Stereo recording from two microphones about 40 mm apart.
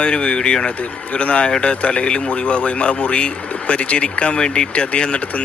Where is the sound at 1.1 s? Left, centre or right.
Left.